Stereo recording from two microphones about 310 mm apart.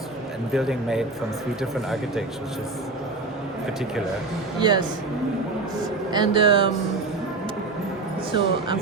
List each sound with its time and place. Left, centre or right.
0.5 s speech: centre
4.6 s speech: centre
6.1 s speech: centre
8.3 s speech: centre